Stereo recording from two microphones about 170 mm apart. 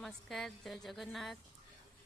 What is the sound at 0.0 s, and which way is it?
A woman's voice, centre (ahead or behind).